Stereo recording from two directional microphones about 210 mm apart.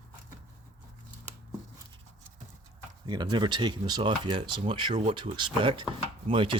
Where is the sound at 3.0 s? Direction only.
20° right (ahead or behind).